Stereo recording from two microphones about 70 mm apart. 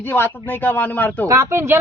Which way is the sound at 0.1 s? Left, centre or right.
Left.